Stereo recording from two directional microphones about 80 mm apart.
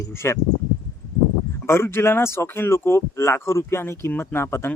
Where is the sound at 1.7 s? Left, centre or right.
Left.